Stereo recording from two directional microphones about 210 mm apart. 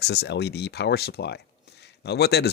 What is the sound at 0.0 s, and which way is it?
Speech, 50° left (ahead or behind).